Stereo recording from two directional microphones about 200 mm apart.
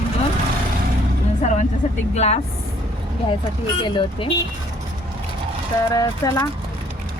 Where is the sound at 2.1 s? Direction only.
35° left (ahead or behind).